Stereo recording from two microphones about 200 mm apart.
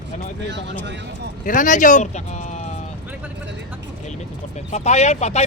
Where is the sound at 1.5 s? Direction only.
40° left (ahead or behind).